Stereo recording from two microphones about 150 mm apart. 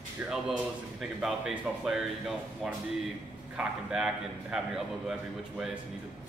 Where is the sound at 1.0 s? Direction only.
Centre (ahead or behind).